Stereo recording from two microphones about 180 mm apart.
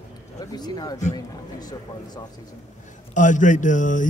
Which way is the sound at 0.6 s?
20° left (ahead or behind).